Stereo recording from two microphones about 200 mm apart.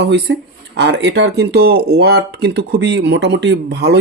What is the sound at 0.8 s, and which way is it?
Speech, 60° right (ahead or behind).